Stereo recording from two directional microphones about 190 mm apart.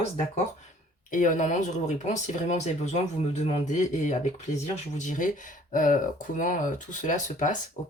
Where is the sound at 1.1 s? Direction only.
45° left (ahead or behind).